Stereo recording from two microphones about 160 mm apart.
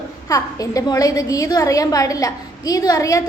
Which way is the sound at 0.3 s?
20° left (ahead or behind).